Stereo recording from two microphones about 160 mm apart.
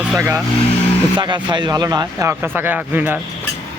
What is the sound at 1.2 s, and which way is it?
A man's voice, 30° right (ahead or behind).